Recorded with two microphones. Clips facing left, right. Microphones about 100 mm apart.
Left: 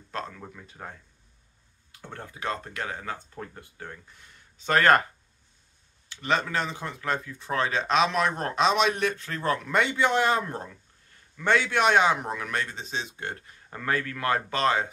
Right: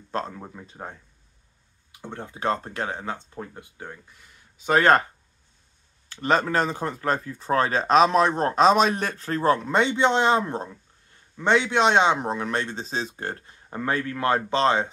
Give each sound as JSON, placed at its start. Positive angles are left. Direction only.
{"t": 0.1, "sound": "a man's voice", "side_deg": -30}
{"t": 2.4, "sound": "a man's voice", "side_deg": -30}
{"t": 6.0, "sound": "a man's voice", "side_deg": -40}